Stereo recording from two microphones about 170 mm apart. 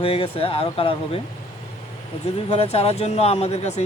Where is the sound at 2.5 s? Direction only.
35° left (ahead or behind).